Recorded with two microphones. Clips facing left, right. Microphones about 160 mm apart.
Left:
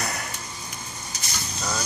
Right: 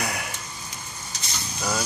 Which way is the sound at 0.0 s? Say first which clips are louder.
Right 1 dB; 10° right (ahead or behind).